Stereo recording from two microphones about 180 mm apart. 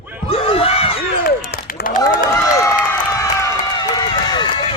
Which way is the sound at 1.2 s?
55° left (ahead or behind).